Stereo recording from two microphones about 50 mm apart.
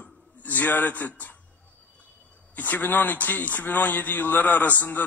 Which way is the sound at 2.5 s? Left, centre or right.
Left.